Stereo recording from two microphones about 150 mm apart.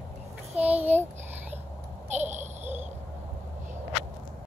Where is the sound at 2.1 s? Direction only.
50° right (ahead or behind).